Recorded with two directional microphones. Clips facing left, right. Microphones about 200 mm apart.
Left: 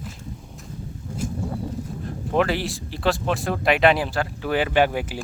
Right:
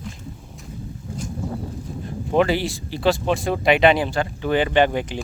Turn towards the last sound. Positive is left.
turn(degrees=5)  # may be behind; listen again after turning